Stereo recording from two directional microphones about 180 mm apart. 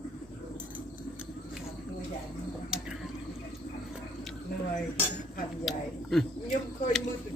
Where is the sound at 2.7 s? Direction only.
5° right (ahead or behind).